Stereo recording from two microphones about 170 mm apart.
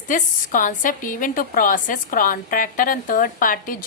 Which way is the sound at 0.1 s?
50° left (ahead or behind).